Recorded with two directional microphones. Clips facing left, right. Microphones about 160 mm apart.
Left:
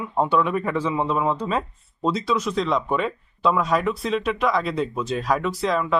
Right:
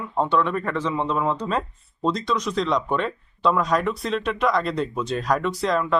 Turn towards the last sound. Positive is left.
turn(degrees=0)  # may be behind; listen again after turning